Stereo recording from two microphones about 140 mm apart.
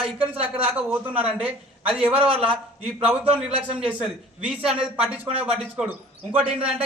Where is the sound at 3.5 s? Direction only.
40° right (ahead or behind).